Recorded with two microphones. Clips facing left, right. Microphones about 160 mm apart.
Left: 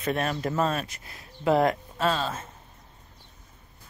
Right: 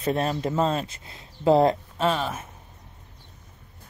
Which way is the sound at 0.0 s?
25° right (ahead or behind).